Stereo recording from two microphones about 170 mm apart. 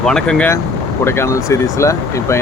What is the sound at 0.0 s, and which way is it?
Speech, 5° left (ahead or behind).